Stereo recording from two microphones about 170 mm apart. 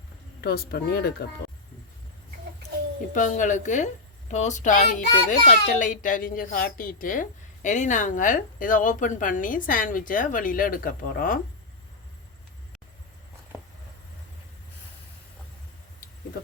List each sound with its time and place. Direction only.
0.4 s speech: 65° left (ahead or behind)
3.2 s a child's voice: 50° left (ahead or behind)